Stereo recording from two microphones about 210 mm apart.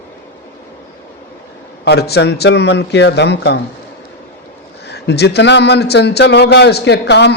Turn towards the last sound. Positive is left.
turn(degrees=55)  # may be behind; listen again after turning